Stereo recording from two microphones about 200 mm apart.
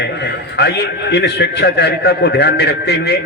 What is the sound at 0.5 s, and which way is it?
A man's voice, 55° left (ahead or behind).